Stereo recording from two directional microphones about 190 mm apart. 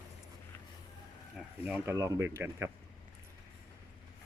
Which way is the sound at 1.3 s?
10° right (ahead or behind).